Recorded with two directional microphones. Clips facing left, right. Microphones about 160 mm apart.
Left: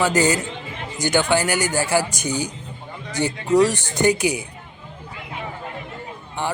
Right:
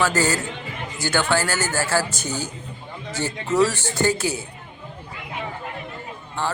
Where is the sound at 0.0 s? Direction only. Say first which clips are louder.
Left 3 dB; 15° left (ahead or behind).